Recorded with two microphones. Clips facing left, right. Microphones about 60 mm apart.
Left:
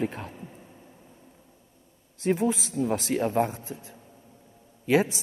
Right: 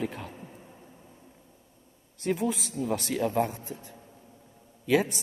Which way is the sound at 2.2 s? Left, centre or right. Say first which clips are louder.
Left 4 dB; left.